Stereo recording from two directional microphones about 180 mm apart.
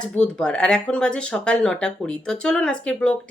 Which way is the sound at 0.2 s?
5° left (ahead or behind).